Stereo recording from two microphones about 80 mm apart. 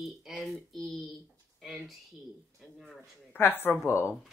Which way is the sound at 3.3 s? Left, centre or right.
Left.